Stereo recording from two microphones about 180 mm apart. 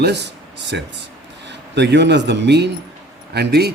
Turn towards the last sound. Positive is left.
turn(degrees=-65)  # may be behind; listen again after turning